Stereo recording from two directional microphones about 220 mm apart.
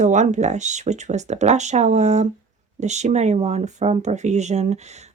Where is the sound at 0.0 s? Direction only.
35° right (ahead or behind).